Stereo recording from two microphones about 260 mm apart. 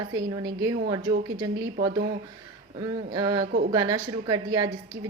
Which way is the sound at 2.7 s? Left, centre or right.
Centre.